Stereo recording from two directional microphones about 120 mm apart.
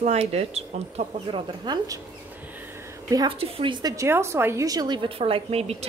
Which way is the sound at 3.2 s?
50° right (ahead or behind).